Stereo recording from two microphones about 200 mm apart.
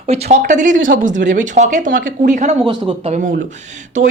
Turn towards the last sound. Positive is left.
turn(degrees=-40)  # may be behind; listen again after turning